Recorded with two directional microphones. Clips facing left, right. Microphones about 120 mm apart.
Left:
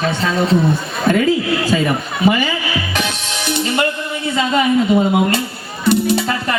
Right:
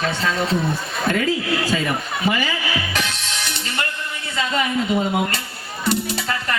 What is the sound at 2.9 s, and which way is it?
Music, 20° left (ahead or behind).